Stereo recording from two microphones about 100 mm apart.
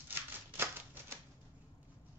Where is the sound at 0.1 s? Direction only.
20° right (ahead or behind).